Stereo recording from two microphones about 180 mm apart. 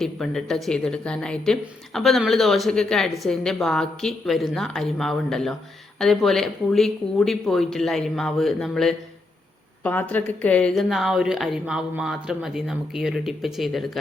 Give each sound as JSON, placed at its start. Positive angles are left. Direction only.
{"t": 0.0, "sound": "speech", "side_deg": 0}